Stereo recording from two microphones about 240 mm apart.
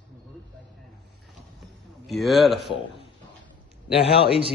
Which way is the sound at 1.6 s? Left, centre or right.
Centre.